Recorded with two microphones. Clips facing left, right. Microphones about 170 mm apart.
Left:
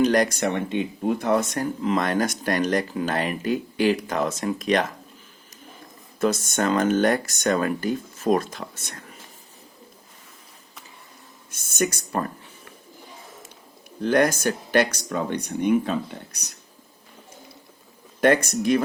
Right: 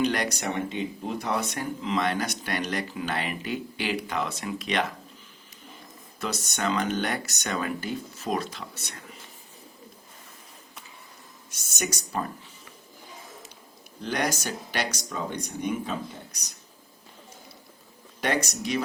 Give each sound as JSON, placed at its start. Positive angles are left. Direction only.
{"t": 0.0, "sound": "speech", "side_deg": 45}
{"t": 6.1, "sound": "speech", "side_deg": 50}
{"t": 11.5, "sound": "speech", "side_deg": 55}
{"t": 14.0, "sound": "speech", "side_deg": 50}
{"t": 18.2, "sound": "speech", "side_deg": 50}